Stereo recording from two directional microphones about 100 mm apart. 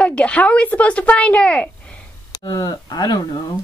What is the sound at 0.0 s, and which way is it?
Speech, 10° left (ahead or behind).